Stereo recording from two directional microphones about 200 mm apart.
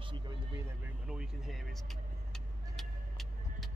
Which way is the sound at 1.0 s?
5° right (ahead or behind).